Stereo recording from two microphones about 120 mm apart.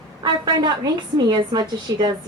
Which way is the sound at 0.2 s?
35° right (ahead or behind).